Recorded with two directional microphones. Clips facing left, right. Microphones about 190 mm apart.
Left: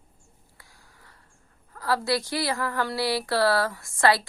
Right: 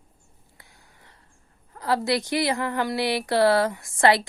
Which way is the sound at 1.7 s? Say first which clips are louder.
Right 2 dB; 20° right (ahead or behind).